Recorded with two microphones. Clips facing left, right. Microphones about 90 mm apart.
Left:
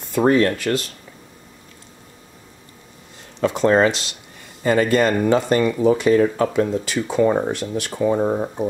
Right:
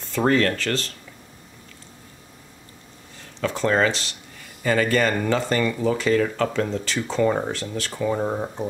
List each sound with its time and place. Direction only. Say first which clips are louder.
0.0 s speech: left 4 dB; 15° left (ahead or behind)
3.3 s speech: left 5 dB; 20° left (ahead or behind)
8.3 s speech: left 5 dB; 5° left (ahead or behind)